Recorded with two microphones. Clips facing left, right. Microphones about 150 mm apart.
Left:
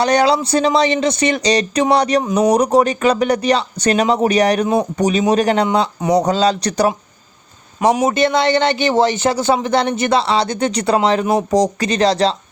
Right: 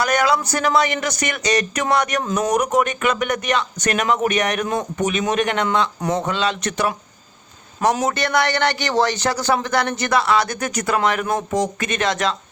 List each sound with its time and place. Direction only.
0.0 s speech: 30° left (ahead or behind)
2.2 s speech: 10° left (ahead or behind)
2.5 s speech: 35° left (ahead or behind)
7.8 s a man's voice: 10° left (ahead or behind)
8.0 s speech: 20° left (ahead or behind)